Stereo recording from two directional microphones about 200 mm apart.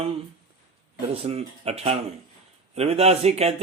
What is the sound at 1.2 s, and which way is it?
Mantra, 30° right (ahead or behind).